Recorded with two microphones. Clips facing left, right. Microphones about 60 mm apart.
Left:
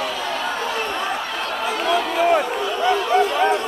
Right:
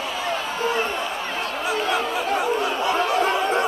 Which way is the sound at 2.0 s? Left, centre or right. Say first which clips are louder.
Left 6 dB; left.